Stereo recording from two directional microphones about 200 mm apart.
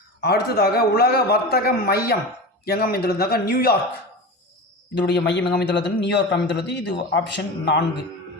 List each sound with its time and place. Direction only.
0.2 s a man's voice: 55° left (ahead or behind)
4.9 s a man's voice: 60° left (ahead or behind)